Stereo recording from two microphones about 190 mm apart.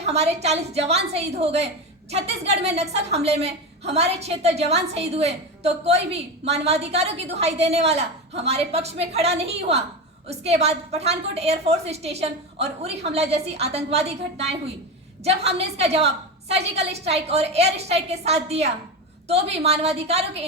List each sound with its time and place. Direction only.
0.0 s a woman's voice: 35° right (ahead or behind)